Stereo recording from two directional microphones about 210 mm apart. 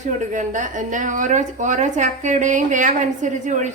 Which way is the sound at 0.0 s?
35° right (ahead or behind).